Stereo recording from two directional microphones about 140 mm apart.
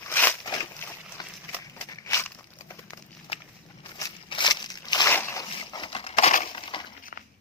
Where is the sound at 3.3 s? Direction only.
40° left (ahead or behind).